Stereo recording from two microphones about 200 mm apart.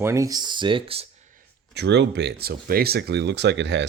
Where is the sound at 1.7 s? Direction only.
60° right (ahead or behind).